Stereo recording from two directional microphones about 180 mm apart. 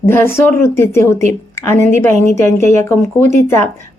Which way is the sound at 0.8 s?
15° left (ahead or behind).